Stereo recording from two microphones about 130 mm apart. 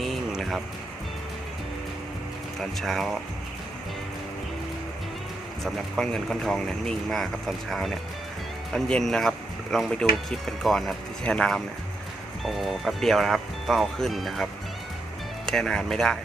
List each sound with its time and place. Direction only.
0.0 s a sound: centre (ahead or behind)
2.6 s speech: centre (ahead or behind)
5.6 s speech: 5° left (ahead or behind)
15.4 s speech: 5° left (ahead or behind)